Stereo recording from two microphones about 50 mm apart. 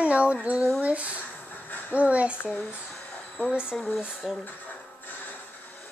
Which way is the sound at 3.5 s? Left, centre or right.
Right.